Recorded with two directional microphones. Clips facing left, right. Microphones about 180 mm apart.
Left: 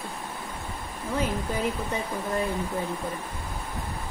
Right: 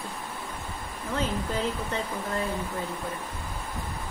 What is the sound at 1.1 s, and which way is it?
Speech, 10° left (ahead or behind).